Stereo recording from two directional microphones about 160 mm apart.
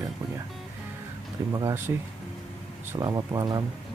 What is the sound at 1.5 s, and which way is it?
Speech, 15° right (ahead or behind).